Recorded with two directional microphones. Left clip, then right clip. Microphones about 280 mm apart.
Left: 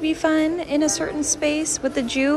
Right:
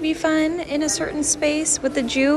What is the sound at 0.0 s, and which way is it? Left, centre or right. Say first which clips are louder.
A woman's voice: even; centre.